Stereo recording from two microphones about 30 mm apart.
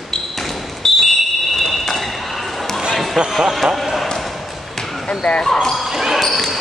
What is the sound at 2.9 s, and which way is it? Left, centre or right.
Basketball bounce, centre.